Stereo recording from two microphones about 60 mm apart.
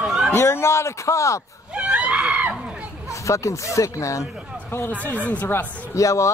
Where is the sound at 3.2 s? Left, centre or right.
Left.